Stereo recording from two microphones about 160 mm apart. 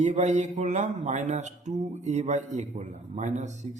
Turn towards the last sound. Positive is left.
turn(degrees=-50)  # may be behind; listen again after turning